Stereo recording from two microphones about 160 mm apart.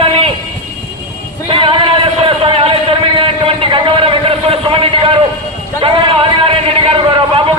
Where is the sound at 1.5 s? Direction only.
30° right (ahead or behind).